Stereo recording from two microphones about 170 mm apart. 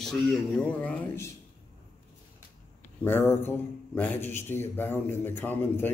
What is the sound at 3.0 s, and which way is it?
A man's voice, 15° left (ahead or behind).